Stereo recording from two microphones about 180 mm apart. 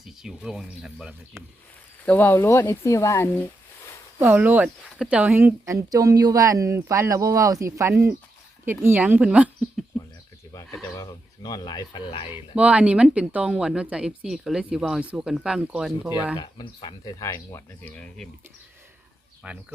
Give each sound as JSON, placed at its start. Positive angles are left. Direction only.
{"t": 0.0, "sound": "speech", "side_deg": 0}
{"t": 2.0, "sound": "speech", "side_deg": 10}
{"t": 4.2, "sound": "speech", "side_deg": -10}
{"t": 10.9, "sound": "speech", "side_deg": 20}
{"t": 12.3, "sound": "speech", "side_deg": -5}
{"t": 16.4, "sound": "speech", "side_deg": 25}
{"t": 19.4, "sound": "speech", "side_deg": -5}